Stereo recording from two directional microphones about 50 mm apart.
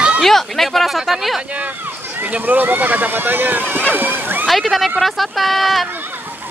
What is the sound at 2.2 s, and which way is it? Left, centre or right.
Speech, right.